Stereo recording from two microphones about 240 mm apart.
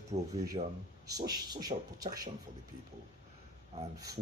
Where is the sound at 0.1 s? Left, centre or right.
Right.